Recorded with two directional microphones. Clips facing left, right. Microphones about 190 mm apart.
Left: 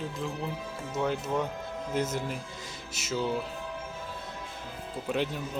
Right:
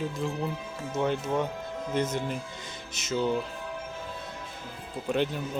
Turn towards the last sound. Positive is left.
turn(degrees=0)  # may be behind; listen again after turning